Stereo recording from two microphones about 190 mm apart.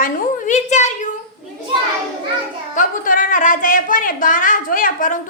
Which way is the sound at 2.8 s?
45° left (ahead or behind).